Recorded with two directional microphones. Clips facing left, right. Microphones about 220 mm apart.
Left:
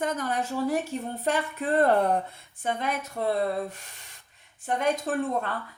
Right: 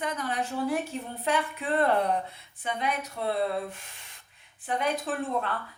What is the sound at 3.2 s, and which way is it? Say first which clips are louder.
Speech: left 4 dB; 45° left (ahead or behind).